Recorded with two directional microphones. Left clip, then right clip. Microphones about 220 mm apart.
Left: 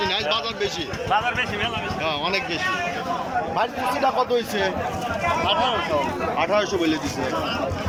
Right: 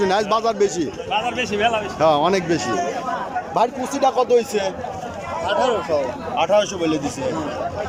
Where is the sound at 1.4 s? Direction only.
45° right (ahead or behind).